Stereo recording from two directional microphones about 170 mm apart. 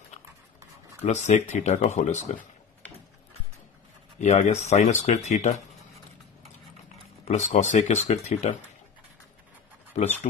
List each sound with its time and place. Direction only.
1.0 s speech: 40° left (ahead or behind)
4.2 s speech: 45° left (ahead or behind)
7.2 s speech: 40° left (ahead or behind)